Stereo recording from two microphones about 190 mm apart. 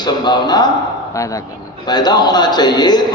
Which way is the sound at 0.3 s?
20° left (ahead or behind).